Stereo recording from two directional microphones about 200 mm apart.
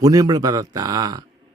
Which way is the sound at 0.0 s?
20° right (ahead or behind).